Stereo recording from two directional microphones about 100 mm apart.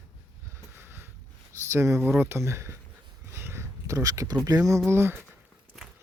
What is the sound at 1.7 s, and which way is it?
Speech, 30° right (ahead or behind).